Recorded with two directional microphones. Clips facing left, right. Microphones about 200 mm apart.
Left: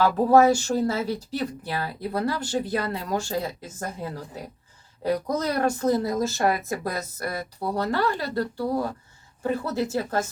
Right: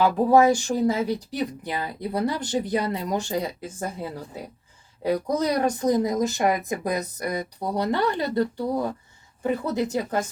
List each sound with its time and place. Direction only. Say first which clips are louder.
0.0 s speech: even; 15° right (ahead or behind)